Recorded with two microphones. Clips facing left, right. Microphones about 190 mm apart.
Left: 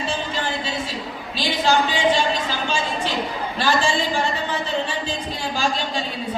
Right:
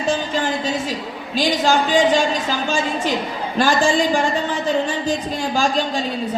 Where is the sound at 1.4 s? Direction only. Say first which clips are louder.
Right 3 dB; 45° right (ahead or behind).